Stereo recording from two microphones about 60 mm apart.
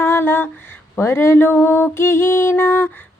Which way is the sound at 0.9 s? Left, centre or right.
Left.